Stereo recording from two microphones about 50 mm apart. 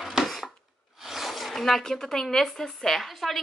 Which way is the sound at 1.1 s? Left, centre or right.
Centre.